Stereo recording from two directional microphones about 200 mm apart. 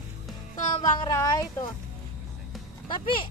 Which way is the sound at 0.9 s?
20° left (ahead or behind).